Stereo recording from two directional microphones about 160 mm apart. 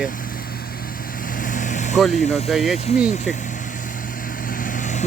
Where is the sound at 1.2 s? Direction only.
55° left (ahead or behind).